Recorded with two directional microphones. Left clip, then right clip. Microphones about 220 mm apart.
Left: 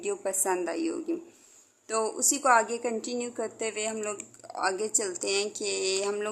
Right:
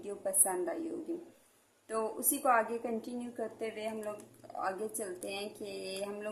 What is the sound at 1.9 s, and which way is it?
A woman's voice, 40° left (ahead or behind).